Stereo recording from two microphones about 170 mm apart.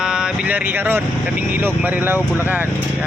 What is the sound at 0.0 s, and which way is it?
Speech, 5° right (ahead or behind).